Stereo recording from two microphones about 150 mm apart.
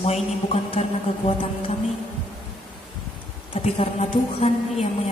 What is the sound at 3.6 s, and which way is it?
A woman's voice, 45° left (ahead or behind).